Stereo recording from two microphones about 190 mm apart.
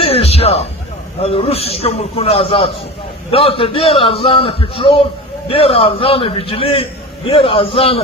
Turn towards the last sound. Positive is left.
turn(degrees=30)  # may be behind; listen again after turning